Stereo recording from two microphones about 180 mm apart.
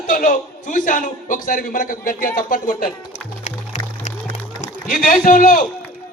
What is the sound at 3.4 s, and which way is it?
Music, 40° left (ahead or behind).